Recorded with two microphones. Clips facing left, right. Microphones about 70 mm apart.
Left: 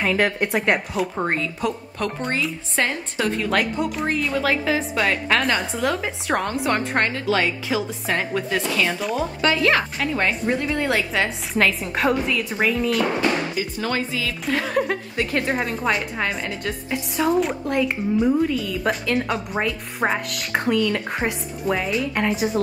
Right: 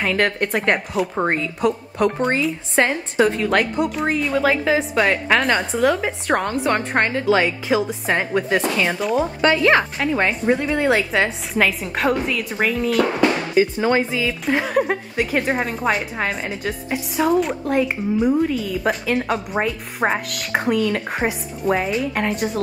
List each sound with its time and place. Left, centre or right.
0.0 s a woman's voice: centre
1.1 s a woman's voice: centre
8.2 s a woman's voice: centre
8.9 s a woman's voice: centre
13.7 s speech: right
14.7 s a woman's voice: centre